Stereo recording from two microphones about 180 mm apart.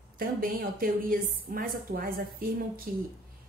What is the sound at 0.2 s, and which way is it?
A woman's voice, 55° right (ahead or behind).